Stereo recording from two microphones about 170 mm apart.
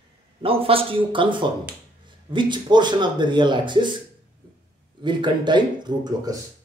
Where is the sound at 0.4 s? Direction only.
35° right (ahead or behind).